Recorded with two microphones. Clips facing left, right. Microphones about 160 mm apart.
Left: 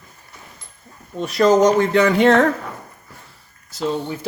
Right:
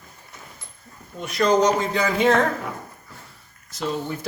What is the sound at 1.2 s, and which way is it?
Speech, 35° left (ahead or behind).